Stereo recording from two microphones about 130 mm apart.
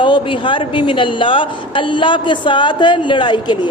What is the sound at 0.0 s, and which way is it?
A woman's voice, 40° left (ahead or behind).